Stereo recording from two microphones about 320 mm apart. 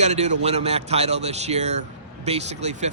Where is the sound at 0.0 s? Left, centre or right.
Right.